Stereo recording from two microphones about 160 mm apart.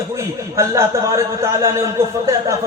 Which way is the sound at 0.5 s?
20° right (ahead or behind).